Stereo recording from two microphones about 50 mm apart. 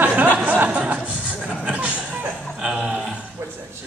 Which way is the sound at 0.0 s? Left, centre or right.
Right.